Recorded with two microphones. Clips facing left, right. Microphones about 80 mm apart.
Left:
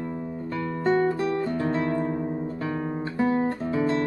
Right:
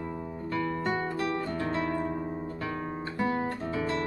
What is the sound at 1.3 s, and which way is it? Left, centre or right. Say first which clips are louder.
Guitar: left 5 dB; left.